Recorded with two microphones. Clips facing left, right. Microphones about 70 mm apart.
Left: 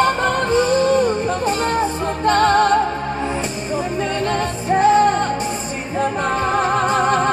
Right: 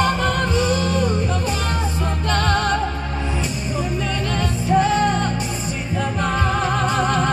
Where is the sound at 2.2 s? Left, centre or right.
Left.